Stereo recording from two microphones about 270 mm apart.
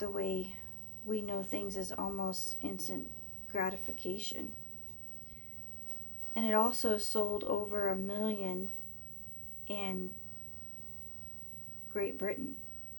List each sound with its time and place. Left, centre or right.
0.0 s speech: left
6.3 s speech: left
9.6 s speech: left
11.9 s speech: left